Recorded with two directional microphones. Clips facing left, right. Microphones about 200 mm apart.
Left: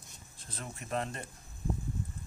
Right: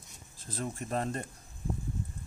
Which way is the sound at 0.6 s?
40° right (ahead or behind).